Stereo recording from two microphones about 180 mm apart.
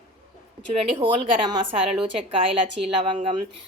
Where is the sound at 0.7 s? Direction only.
30° right (ahead or behind).